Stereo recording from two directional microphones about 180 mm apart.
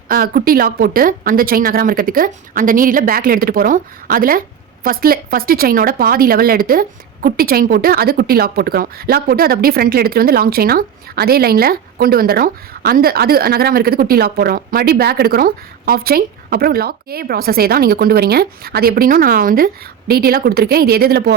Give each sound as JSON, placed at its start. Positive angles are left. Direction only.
{"t": 0.1, "sound": "a woman's voice", "side_deg": -55}